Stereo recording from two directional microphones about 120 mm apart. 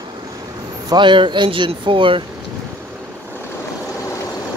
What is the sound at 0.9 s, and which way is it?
Speech, 40° right (ahead or behind).